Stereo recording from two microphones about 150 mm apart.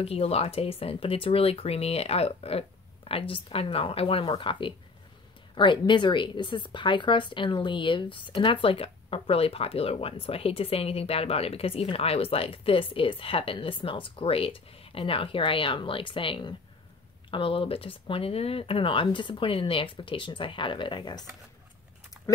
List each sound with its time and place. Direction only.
0.0 s a woman's voice: 40° left (ahead or behind)
22.2 s typing: 5° right (ahead or behind)